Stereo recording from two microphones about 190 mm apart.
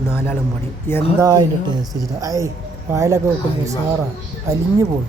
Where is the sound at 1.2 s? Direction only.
20° right (ahead or behind).